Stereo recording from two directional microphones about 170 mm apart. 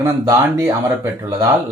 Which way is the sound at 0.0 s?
15° right (ahead or behind).